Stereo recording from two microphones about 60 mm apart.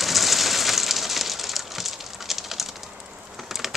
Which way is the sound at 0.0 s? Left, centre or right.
Centre.